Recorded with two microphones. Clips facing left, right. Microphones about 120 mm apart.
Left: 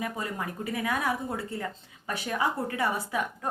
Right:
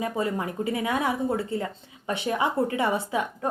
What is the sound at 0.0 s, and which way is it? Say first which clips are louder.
A woman's voice: right 6 dB; 25° right (ahead or behind).